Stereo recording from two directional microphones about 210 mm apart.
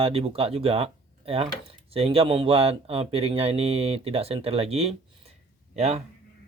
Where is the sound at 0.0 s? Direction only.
25° right (ahead or behind).